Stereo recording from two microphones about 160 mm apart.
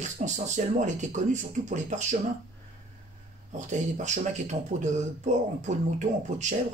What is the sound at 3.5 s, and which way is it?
Speech, 50° right (ahead or behind).